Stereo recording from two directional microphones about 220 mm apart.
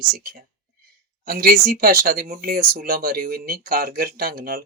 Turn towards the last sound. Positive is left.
turn(degrees=-45)  # may be behind; listen again after turning